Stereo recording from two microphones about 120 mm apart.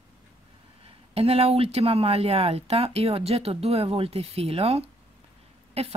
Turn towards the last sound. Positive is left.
turn(degrees=-60)  # may be behind; listen again after turning